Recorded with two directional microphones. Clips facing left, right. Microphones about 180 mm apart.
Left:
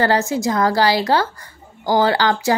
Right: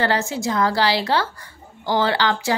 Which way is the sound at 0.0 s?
40° left (ahead or behind).